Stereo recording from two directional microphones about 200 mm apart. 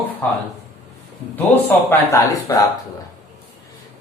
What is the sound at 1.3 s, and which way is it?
Speech, 10° left (ahead or behind).